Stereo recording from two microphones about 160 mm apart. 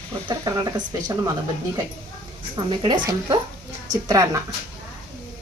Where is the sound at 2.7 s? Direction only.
30° right (ahead or behind).